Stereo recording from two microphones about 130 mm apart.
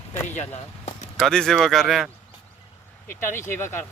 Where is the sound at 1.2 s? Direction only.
5° left (ahead or behind).